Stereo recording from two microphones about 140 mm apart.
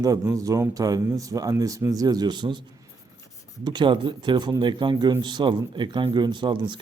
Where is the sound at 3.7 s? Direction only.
35° right (ahead or behind).